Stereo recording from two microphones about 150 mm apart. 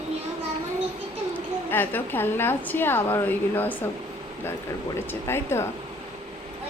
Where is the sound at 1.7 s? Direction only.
15° left (ahead or behind).